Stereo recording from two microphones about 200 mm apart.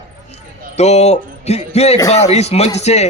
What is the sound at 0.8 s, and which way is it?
A man's voice, 35° left (ahead or behind).